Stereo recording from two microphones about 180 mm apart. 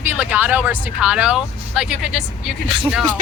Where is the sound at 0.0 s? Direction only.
10° right (ahead or behind).